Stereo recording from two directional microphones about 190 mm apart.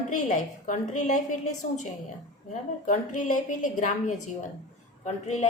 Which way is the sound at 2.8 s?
40° left (ahead or behind).